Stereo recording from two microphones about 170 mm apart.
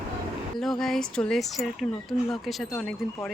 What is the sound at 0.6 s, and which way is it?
Speech, centre (ahead or behind).